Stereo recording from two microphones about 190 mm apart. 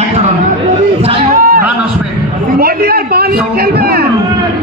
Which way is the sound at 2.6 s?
50° right (ahead or behind).